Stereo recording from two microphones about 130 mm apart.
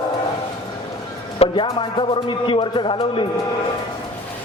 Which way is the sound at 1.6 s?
35° left (ahead or behind).